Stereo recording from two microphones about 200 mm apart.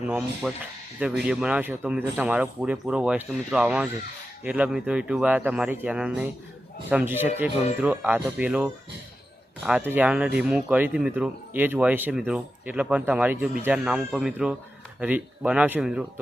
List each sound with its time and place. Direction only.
0.0 s speech: 5° right (ahead or behind)